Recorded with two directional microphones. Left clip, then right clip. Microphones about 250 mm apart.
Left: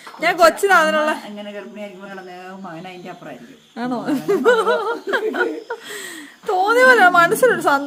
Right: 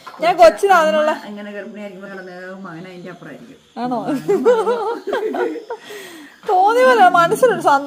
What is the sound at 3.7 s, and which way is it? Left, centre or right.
A woman's voice, centre.